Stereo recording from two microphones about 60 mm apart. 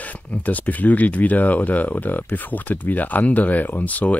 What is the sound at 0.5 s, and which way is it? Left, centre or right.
Speech, left.